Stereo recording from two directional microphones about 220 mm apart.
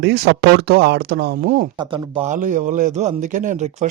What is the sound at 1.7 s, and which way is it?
Speech, 20° right (ahead or behind).